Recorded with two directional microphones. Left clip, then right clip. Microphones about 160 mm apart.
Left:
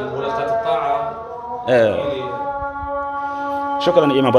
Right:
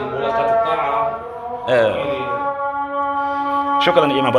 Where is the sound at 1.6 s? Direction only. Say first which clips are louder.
Left 1 dB; 65° left (ahead or behind).